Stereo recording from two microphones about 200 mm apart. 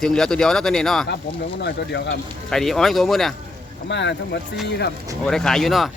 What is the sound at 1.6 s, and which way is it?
Speech, 60° left (ahead or behind).